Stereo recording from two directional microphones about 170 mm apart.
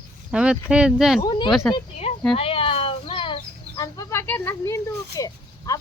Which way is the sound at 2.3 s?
35° left (ahead or behind).